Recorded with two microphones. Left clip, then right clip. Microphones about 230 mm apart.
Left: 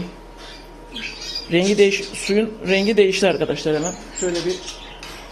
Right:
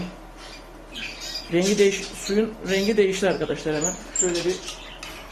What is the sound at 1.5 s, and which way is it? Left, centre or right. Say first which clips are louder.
Speech: left 4 dB; left.